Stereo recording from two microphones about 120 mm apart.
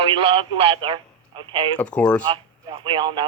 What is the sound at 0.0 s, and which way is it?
Speech, 45° right (ahead or behind).